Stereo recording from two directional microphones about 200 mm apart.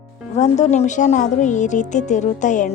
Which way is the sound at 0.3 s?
35° left (ahead or behind).